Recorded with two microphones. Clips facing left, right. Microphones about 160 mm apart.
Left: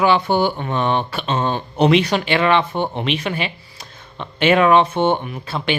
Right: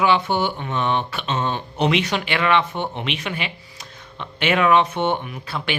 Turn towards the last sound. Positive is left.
turn(degrees=30)  # may be behind; listen again after turning